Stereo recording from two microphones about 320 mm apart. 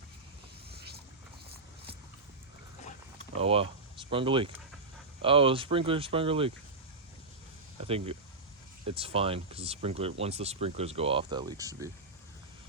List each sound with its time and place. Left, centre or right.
0.7 s boat: right
3.3 s speech: centre
7.8 s speech: centre